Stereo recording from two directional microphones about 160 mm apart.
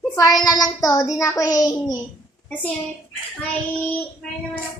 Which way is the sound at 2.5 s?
10° left (ahead or behind).